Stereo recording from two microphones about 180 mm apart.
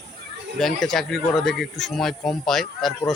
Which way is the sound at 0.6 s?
Centre (ahead or behind).